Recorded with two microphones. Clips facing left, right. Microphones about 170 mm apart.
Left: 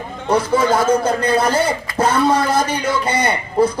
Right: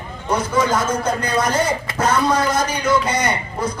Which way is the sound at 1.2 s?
30° left (ahead or behind).